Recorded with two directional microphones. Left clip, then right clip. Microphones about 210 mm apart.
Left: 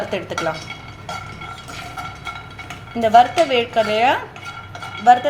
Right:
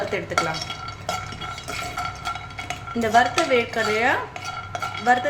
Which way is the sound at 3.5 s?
5° left (ahead or behind).